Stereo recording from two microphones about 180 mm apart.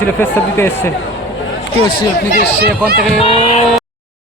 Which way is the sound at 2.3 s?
60° right (ahead or behind).